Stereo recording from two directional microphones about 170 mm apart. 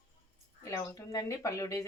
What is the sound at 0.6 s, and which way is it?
Speech, 15° left (ahead or behind).